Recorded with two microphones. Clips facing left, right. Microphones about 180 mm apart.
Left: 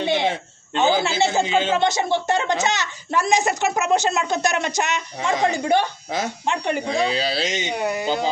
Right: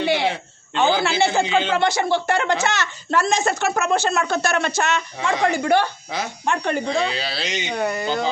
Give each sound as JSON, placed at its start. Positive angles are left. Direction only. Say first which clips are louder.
{"t": 0.0, "sound": "a sound", "louder": "right 1 dB", "side_deg": 20}
{"t": 1.2, "sound": "a woman's voice", "louder": "right 1 dB", "side_deg": 20}
{"t": 7.0, "sound": "speech", "louder": "left 3 dB", "side_deg": 40}
{"t": 7.8, "sound": "speech", "louder": "right 1 dB", "side_deg": 10}